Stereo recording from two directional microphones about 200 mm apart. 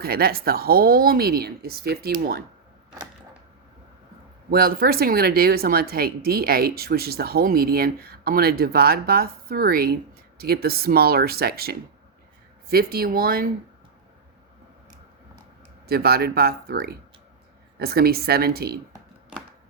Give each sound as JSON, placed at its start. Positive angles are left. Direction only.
{"t": 0.0, "sound": "speech", "side_deg": -50}
{"t": 4.5, "sound": "speech", "side_deg": -50}
{"t": 15.9, "sound": "speech", "side_deg": -50}